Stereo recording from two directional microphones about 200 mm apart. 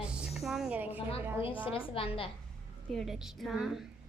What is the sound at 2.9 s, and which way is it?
Speech, centre (ahead or behind).